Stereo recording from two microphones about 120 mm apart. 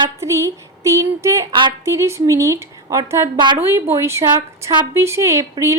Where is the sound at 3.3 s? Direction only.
40° right (ahead or behind).